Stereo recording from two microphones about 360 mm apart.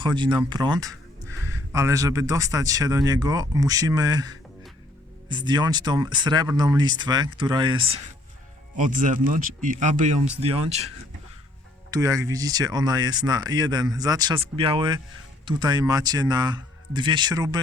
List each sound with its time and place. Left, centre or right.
0.0 s speech: centre
11.9 s speech: centre